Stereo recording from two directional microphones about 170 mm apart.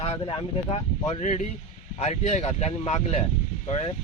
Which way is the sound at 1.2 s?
45° left (ahead or behind).